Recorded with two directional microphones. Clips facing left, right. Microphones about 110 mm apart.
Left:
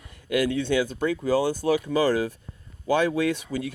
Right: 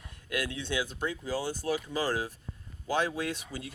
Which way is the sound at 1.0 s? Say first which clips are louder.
Left 10 dB; 75° left (ahead or behind).